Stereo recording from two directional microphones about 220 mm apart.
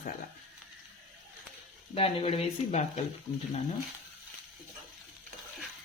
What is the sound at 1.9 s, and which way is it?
Speech, 25° left (ahead or behind).